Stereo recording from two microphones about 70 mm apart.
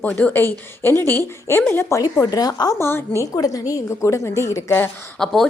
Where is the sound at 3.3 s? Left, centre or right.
Left.